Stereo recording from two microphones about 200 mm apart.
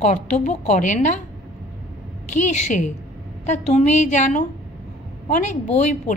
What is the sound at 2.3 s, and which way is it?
A woman's voice, 35° left (ahead or behind).